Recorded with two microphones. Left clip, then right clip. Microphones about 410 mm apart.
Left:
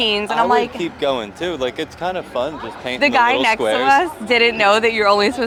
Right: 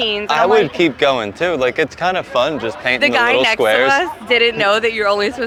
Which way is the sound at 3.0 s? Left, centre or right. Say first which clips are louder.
Left 1 dB; centre.